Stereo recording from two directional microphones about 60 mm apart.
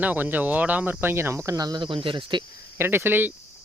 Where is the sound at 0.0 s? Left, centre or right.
Right.